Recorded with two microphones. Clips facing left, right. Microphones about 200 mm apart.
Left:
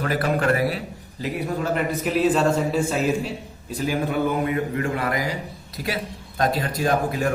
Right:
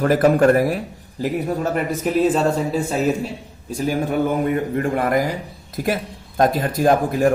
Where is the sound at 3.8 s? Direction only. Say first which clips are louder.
Right 3 dB; 45° right (ahead or behind).